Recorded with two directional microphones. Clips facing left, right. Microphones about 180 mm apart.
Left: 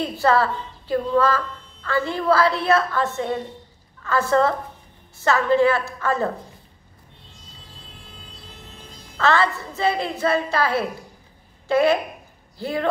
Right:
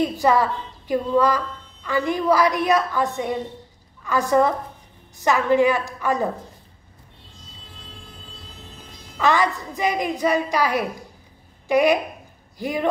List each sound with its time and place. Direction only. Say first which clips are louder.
0.0 s a woman's voice: right 1 dB; 15° right (ahead or behind)
9.2 s a woman's voice: even; 15° right (ahead or behind)